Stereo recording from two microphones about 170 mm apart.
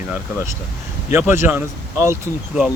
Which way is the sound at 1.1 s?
15° right (ahead or behind).